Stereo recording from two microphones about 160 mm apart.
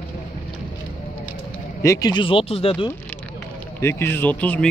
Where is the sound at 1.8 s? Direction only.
20° left (ahead or behind).